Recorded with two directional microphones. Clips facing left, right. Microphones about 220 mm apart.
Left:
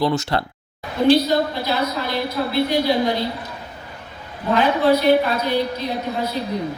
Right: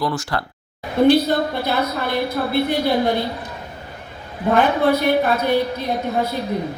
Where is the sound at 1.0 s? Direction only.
55° right (ahead or behind).